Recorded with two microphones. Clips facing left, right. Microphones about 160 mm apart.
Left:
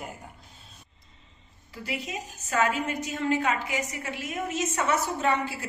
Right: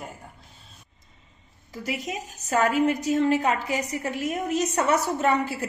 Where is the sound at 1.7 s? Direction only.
40° right (ahead or behind).